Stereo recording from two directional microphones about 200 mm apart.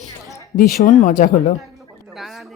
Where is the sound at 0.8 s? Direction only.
40° left (ahead or behind).